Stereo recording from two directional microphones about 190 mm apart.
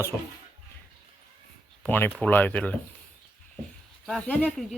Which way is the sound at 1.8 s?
10° left (ahead or behind).